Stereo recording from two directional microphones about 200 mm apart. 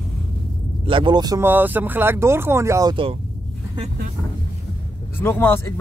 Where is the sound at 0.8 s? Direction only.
25° right (ahead or behind).